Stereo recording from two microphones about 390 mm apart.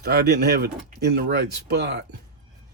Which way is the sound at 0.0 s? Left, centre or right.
Right.